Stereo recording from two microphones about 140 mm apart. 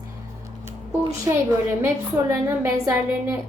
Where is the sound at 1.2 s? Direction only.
20° right (ahead or behind).